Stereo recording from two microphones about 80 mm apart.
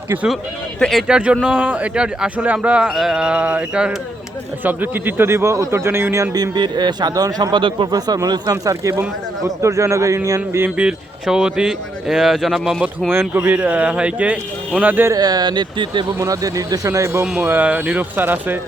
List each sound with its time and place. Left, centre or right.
0.9 s speech: centre
1.1 s speech: centre
2.9 s speech: centre; by 6.3 s right
6.3 s a man's voice: right
7.5 s a man's voice: right
7.9 s speech: right
10.2 s a sound: right
10.8 s speech: centre
13.1 s speech: right
13.4 s speech: centre
15.1 s a man's voice: right
16.1 s speech: right
17.4 s speech: right